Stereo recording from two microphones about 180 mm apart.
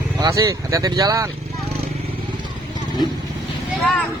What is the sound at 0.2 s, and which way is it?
Speech, 20° right (ahead or behind).